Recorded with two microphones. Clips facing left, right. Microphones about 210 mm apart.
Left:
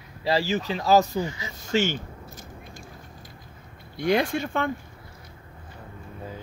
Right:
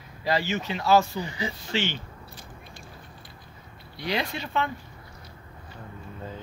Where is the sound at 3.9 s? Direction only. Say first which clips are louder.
Left 7 dB; 50° left (ahead or behind).